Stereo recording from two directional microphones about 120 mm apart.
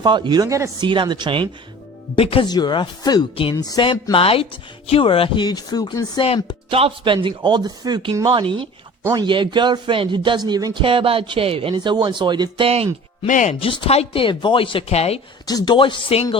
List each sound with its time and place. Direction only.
0.0 s a man's voice: 40° right (ahead or behind)
0.8 s a man's voice: 40° right (ahead or behind)
2.1 s speech: 50° left (ahead or behind)
2.5 s speech: 35° left (ahead or behind)
4.1 s speech: 50° left (ahead or behind); by 6.2 s 35° left (ahead or behind)
6.7 s a man's voice: 50° right (ahead or behind)
12.6 s speech: 55° right (ahead or behind)
13.2 s speech: 90° left
13.6 s speech: 45° left (ahead or behind)
15.4 s speech: 35° left (ahead or behind)